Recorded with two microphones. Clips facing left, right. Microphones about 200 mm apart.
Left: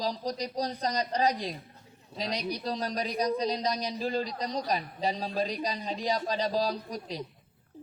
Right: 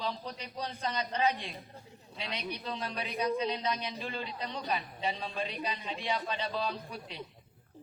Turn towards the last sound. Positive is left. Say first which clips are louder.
# left 6 dB
turn(degrees=35)  # may be behind; listen again after turning